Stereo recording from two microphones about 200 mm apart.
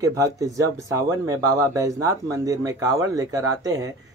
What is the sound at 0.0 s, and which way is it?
Speech, 15° right (ahead or behind).